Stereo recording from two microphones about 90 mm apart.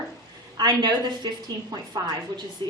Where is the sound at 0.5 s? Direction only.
50° right (ahead or behind).